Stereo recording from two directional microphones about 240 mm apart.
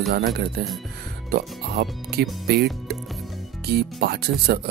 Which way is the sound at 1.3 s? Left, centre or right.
Right.